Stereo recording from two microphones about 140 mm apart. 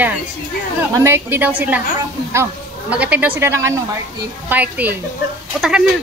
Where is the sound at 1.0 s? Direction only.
15° right (ahead or behind).